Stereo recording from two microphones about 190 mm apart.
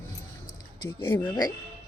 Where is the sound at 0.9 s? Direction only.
25° left (ahead or behind).